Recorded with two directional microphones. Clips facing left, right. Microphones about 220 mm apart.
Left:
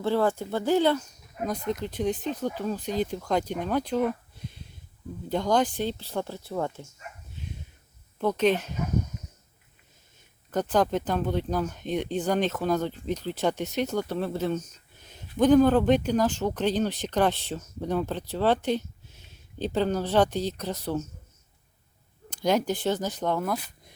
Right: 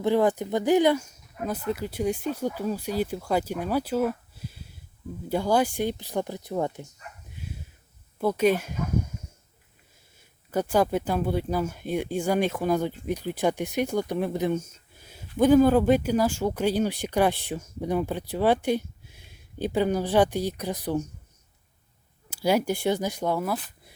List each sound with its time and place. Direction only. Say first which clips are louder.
0.0 s speech: right 3 dB; 15° right (ahead or behind)
7.4 s a sound: right 1 dB; 10° right (ahead or behind)
8.2 s speech: right 1 dB; 10° right (ahead or behind)
10.5 s speech: right 1 dB; 10° right (ahead or behind)
22.3 s speech: right 1 dB; 10° right (ahead or behind)